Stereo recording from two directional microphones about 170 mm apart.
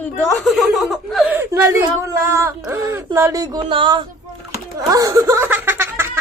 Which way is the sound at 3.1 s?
20° right (ahead or behind).